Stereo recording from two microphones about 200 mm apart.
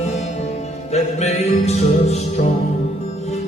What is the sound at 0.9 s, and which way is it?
Music, 35° left (ahead or behind).